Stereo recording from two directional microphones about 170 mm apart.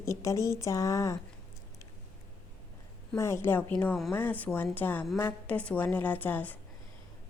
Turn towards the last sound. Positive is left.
turn(degrees=10)  # may be behind; listen again after turning